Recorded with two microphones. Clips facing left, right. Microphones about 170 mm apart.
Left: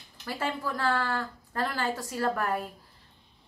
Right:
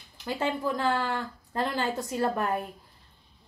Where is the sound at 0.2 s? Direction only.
20° right (ahead or behind).